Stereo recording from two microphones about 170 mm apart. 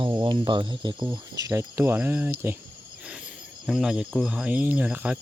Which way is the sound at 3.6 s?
5° right (ahead or behind).